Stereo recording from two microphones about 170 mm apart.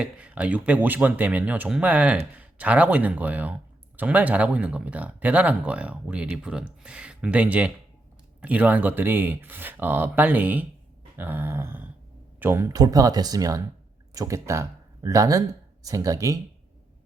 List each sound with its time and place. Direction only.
0.0 s speech: 5° right (ahead or behind)